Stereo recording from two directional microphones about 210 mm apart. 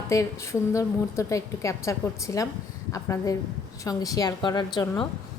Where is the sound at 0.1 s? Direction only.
15° left (ahead or behind).